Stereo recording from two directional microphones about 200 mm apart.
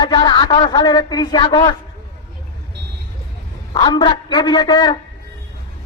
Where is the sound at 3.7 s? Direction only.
20° left (ahead or behind).